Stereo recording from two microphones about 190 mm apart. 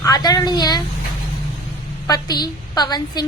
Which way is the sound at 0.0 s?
20° left (ahead or behind).